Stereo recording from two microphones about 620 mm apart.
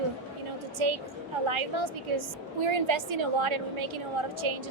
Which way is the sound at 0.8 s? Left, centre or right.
Right.